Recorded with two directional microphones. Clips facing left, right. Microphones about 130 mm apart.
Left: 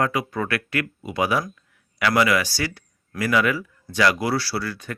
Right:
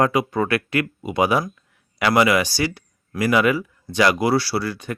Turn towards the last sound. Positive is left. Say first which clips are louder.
# right 4 dB
turn(degrees=-20)  # may be behind; listen again after turning